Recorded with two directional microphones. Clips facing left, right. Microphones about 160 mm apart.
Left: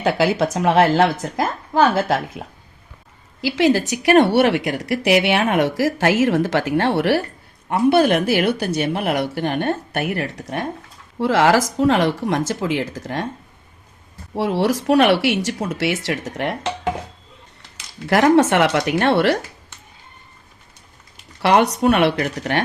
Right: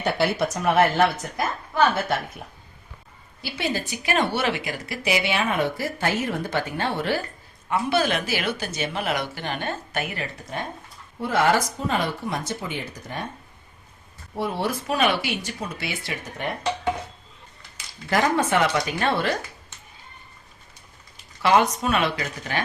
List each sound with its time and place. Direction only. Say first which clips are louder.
0.0 s speech: left 5 dB; 90° left
3.4 s a woman's voice: left 11 dB; 90° left
7.7 s speech: left 8 dB; 60° left (ahead or behind)
11.2 s speech: left 5 dB; 90° left
14.3 s speech: left 7 dB; 90° left
17.7 s a woman's voice: left 6 dB; 80° left
21.4 s a woman's voice: left 5 dB; 70° left (ahead or behind)